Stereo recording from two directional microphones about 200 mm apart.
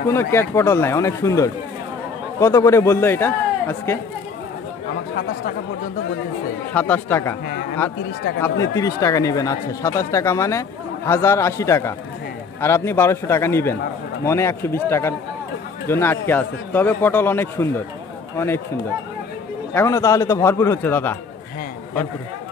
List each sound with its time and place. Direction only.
0.1 s speech: 10° left (ahead or behind)
6.7 s speech: 5° left (ahead or behind)
8.4 s speech: 15° left (ahead or behind)
19.7 s speech: 15° left (ahead or behind)